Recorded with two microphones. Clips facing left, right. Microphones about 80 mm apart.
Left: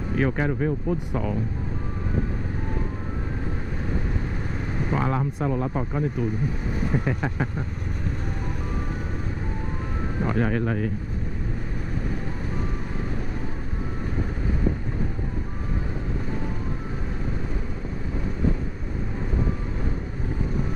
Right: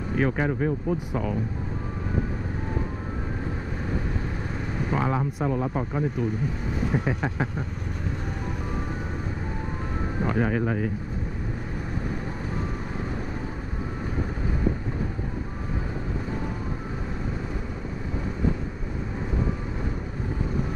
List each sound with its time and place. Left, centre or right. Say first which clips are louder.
0.1 s speech: even; centre
4.9 s speech: even; centre
10.3 s speech: even; centre